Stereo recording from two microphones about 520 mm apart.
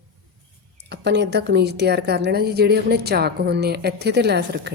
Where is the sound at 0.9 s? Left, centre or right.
Centre.